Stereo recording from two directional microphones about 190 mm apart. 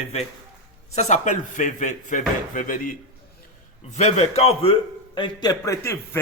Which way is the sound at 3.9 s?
35° left (ahead or behind).